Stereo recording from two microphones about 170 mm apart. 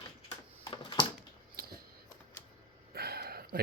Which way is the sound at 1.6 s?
60° right (ahead or behind).